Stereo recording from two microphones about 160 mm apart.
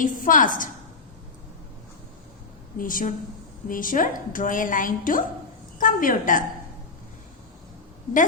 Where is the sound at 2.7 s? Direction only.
60° left (ahead or behind).